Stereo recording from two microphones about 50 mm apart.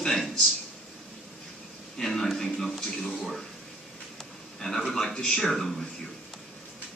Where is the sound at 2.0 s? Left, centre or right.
Centre.